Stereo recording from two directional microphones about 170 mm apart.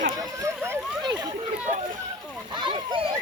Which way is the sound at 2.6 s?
30° right (ahead or behind).